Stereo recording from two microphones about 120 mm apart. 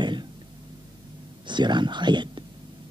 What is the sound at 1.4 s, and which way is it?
Speech, 40° right (ahead or behind).